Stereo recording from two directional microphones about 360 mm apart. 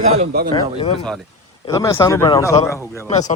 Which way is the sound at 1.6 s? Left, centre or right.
Centre.